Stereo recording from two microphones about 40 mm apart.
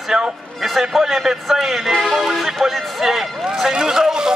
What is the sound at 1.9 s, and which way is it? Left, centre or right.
Speech, centre.